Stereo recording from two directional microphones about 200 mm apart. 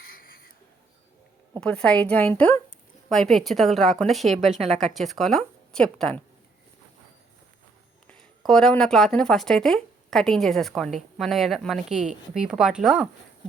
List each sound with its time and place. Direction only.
0.1 s a sound: 45° left (ahead or behind)
1.6 s a woman's voice: 5° left (ahead or behind)
4.4 s a woman's voice: 35° right (ahead or behind)
4.8 s a woman's voice: centre (ahead or behind)
8.0 s a woman's voice: centre (ahead or behind)